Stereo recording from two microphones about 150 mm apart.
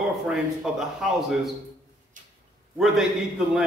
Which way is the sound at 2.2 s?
60° right (ahead or behind).